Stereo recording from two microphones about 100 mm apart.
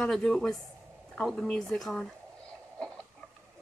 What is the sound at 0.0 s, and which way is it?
Speech, 5° left (ahead or behind).